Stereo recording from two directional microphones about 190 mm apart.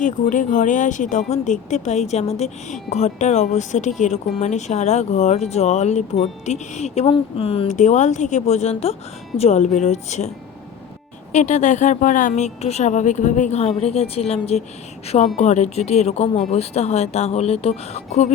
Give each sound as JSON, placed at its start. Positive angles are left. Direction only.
{"t": 0.0, "sound": "speech", "side_deg": 40}
{"t": 11.3, "sound": "speech", "side_deg": 40}